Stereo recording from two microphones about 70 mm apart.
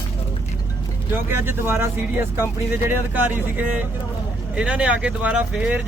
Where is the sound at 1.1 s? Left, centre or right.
Right.